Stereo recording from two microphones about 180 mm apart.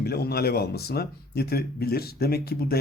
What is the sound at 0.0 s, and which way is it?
Speech, 60° left (ahead or behind).